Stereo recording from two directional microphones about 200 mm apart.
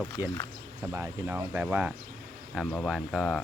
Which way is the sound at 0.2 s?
10° right (ahead or behind).